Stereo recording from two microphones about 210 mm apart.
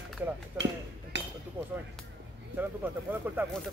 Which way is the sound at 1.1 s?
60° right (ahead or behind).